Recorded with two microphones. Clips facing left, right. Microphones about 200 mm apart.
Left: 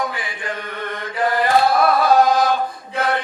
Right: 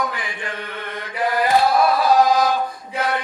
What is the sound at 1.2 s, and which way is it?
Chant, 55° left (ahead or behind).